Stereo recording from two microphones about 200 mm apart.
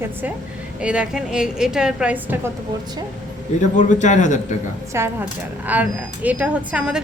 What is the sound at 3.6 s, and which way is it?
Speech, 40° left (ahead or behind).